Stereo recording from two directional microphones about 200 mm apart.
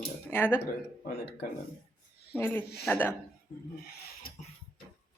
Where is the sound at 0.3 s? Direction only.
10° left (ahead or behind).